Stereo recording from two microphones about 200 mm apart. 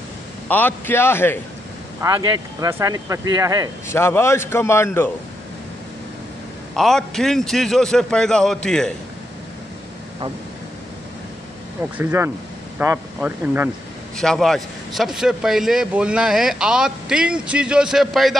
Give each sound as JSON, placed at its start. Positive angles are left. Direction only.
{"t": 0.5, "sound": "a man's voice", "side_deg": 10}
{"t": 2.0, "sound": "speech", "side_deg": -20}
{"t": 3.9, "sound": "a man's voice", "side_deg": 10}
{"t": 6.7, "sound": "a man's voice", "side_deg": 0}
{"t": 12.0, "sound": "speech", "side_deg": -10}
{"t": 14.1, "sound": "a man's voice", "side_deg": 0}